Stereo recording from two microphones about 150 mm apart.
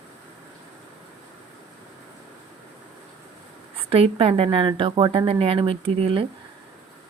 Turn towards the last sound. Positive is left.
turn(degrees=-40)  # may be behind; listen again after turning